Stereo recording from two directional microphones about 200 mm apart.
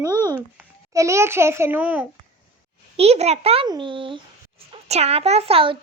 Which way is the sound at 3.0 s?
30° right (ahead or behind).